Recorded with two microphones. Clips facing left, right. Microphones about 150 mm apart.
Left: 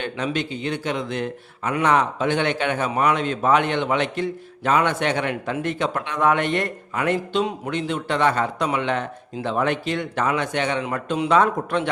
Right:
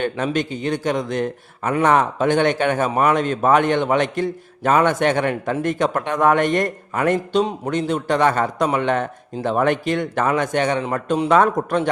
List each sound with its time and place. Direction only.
0.0 s a man's voice: 45° right (ahead or behind)